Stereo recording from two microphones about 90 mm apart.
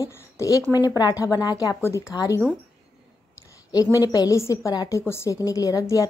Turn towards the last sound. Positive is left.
turn(degrees=40)  # may be behind; listen again after turning